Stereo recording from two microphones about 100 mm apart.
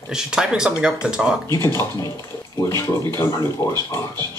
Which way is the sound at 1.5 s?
30° left (ahead or behind).